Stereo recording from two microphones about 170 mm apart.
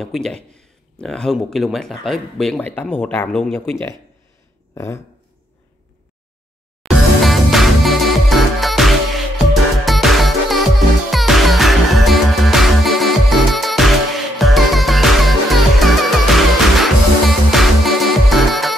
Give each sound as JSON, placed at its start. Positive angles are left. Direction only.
{"t": 0.0, "sound": "speech", "side_deg": 0}
{"t": 4.7, "sound": "speech", "side_deg": 15}
{"t": 6.8, "sound": "music", "side_deg": 0}